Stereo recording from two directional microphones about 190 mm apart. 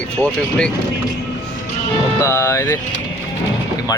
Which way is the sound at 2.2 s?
15° left (ahead or behind).